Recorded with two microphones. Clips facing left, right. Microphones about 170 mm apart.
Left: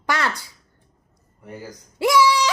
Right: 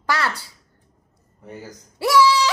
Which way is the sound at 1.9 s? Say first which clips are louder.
Right 1 dB; 15° left (ahead or behind).